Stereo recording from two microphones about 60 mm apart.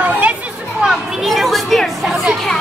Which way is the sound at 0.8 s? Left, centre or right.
Centre.